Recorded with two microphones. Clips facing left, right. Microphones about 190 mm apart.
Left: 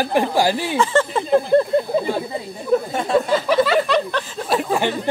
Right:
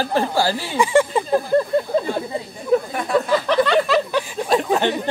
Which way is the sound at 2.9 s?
25° left (ahead or behind).